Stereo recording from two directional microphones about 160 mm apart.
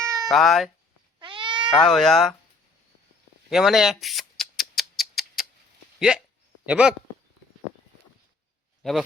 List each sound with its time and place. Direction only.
0.0 s cat: 20° right (ahead or behind)
0.3 s speech: centre (ahead or behind)
1.2 s cat: 30° right (ahead or behind)
1.7 s speech: centre (ahead or behind)
3.5 s a sound: centre (ahead or behind)
6.7 s speech: 5° right (ahead or behind)
8.8 s speech: centre (ahead or behind)